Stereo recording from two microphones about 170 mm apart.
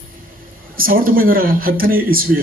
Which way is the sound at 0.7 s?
60° right (ahead or behind).